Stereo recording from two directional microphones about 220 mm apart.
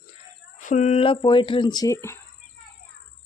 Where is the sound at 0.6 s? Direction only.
30° left (ahead or behind); by 2.2 s 15° left (ahead or behind).